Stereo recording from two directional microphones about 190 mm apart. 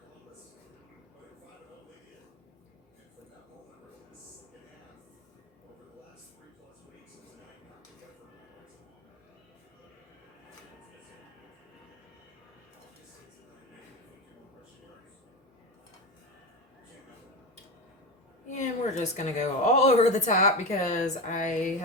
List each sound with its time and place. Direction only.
18.5 s speech: 40° left (ahead or behind)